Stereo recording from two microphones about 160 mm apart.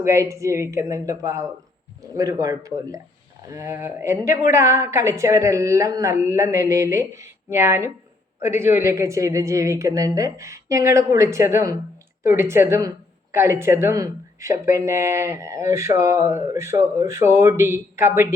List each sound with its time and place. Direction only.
0.0 s a woman's voice: 20° right (ahead or behind)